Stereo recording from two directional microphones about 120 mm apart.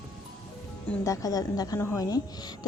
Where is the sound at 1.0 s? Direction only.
30° left (ahead or behind).